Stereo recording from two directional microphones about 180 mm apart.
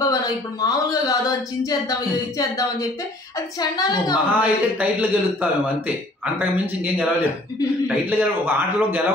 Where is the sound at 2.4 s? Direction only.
20° left (ahead or behind).